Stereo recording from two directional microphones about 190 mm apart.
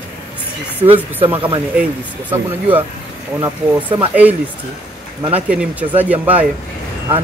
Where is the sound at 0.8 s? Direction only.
30° right (ahead or behind).